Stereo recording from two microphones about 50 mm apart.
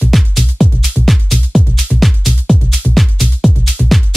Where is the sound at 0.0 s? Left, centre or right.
Centre.